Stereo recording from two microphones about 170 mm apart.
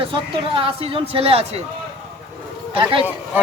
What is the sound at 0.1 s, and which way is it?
Speech, 30° right (ahead or behind).